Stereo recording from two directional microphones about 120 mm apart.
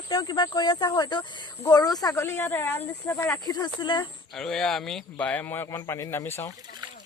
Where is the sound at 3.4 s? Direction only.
35° left (ahead or behind).